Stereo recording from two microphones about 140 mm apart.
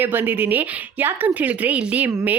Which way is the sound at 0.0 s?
15° right (ahead or behind).